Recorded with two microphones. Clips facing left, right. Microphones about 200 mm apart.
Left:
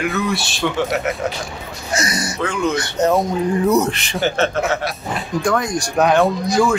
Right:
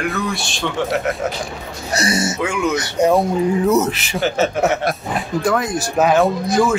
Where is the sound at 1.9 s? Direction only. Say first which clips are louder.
Right 3 dB; 30° right (ahead or behind).